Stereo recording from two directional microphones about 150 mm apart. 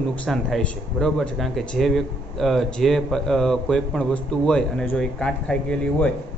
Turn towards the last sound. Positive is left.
turn(degrees=5)  # may be behind; listen again after turning